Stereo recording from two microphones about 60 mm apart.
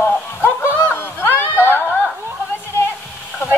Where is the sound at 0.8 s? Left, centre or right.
Left.